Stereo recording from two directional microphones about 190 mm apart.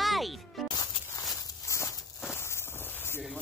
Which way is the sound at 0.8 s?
20° left (ahead or behind).